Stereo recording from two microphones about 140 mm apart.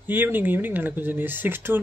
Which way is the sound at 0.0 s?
15° right (ahead or behind).